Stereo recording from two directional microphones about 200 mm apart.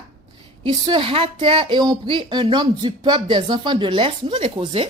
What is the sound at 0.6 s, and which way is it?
Speech, 25° right (ahead or behind).